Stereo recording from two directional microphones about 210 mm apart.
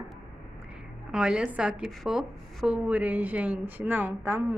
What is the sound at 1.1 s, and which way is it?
A woman's voice, 5° right (ahead or behind).